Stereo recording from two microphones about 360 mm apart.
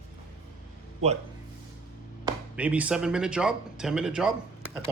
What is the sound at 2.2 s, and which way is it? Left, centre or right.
Speech, centre.